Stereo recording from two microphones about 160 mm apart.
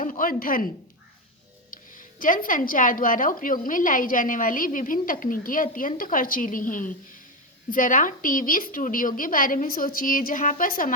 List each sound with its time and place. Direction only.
0.0 s speech: 60° left (ahead or behind)
1.7 s speech: 60° left (ahead or behind)